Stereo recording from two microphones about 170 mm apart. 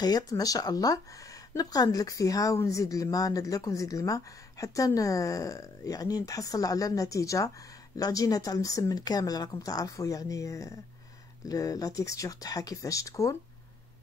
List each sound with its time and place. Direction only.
0.0 s speech: 20° left (ahead or behind)